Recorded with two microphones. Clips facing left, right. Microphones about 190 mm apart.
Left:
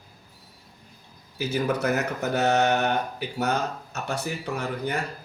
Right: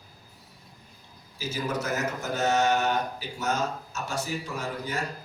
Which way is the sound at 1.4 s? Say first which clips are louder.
Left 5 dB; 65° left (ahead or behind).